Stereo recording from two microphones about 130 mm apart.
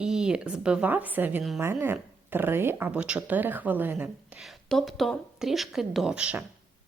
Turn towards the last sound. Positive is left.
turn(degrees=-10)  # may be behind; listen again after turning